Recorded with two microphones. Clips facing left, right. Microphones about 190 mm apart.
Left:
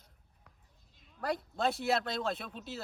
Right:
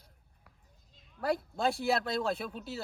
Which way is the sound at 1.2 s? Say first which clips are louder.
Right 2 dB; centre (ahead or behind).